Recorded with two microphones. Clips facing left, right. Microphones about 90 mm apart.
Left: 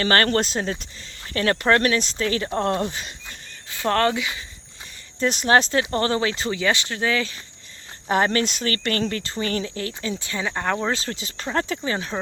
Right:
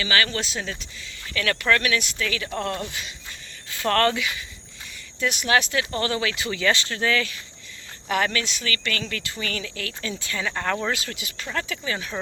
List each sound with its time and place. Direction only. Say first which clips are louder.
0.0 s speech: left 5 dB; 45° left (ahead or behind); by 4.4 s 20° left (ahead or behind)
5.2 s speech: left 4 dB; 35° left (ahead or behind)
6.5 s speech: left 1 dB; 20° left (ahead or behind)
8.0 s speech: left 4 dB; 35° left (ahead or behind); by 11.0 s 20° left (ahead or behind)
11.0 s speech: left 4 dB; 30° left (ahead or behind)